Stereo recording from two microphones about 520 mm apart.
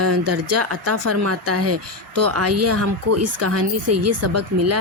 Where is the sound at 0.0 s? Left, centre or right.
Right.